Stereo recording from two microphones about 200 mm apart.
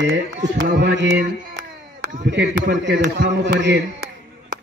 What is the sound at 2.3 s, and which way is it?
A man's voice, 60° right (ahead or behind).